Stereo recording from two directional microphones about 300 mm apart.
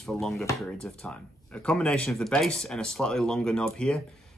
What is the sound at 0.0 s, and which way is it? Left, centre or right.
Speech, centre.